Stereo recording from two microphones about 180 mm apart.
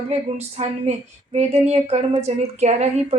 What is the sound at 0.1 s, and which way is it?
Speech, 35° right (ahead or behind).